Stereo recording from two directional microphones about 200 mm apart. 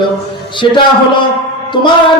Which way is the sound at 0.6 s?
25° left (ahead or behind).